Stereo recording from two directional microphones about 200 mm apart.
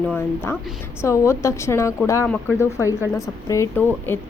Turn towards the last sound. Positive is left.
turn(degrees=10)  # may be behind; listen again after turning